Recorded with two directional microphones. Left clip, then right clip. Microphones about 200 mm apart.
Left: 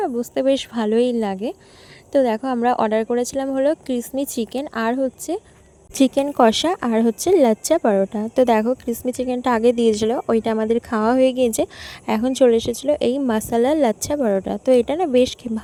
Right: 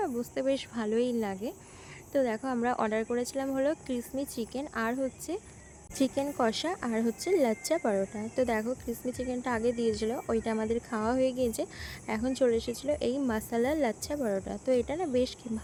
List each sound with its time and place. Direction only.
0.0 s speech: 35° left (ahead or behind)
5.9 s speech: 45° left (ahead or behind)